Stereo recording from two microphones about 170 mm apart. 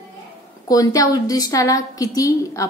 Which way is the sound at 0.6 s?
20° left (ahead or behind).